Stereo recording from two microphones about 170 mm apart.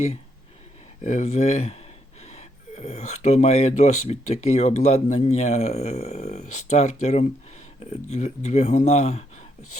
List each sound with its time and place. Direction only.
1.0 s speech: 45° left (ahead or behind)